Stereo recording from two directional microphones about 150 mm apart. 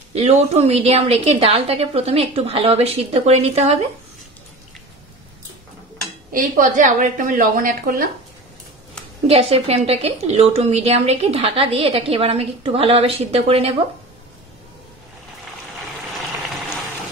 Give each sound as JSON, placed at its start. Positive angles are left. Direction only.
{"t": 0.1, "sound": "a woman's voice", "side_deg": -45}
{"t": 6.3, "sound": "a woman's voice", "side_deg": -60}
{"t": 9.3, "sound": "a woman's voice", "side_deg": -40}